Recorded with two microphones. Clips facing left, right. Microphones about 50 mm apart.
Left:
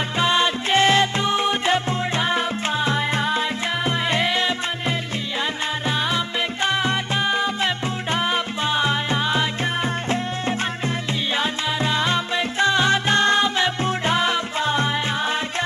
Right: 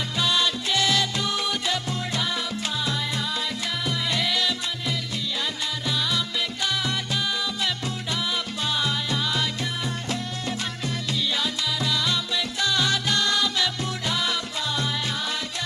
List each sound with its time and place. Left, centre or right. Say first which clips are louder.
0.2 s music: left 5 dB; left
11.3 s music: left 4 dB; left